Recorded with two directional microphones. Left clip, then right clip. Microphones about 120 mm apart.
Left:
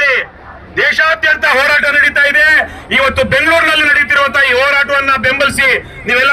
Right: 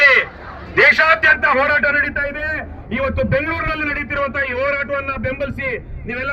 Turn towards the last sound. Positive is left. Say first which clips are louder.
# left 14 dB
turn(degrees=20)  # may be behind; listen again after turning